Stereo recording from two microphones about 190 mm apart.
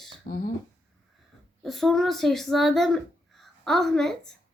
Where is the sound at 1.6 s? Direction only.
Centre (ahead or behind).